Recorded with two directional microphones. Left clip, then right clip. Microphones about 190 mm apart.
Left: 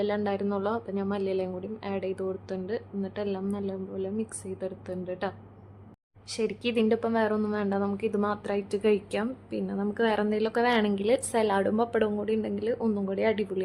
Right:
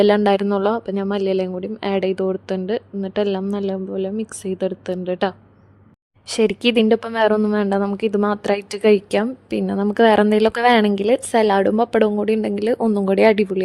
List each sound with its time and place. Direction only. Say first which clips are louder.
0.0 s speech: right 14 dB; 45° right (ahead or behind)
0.4 s speech: right 10 dB; 35° right (ahead or behind)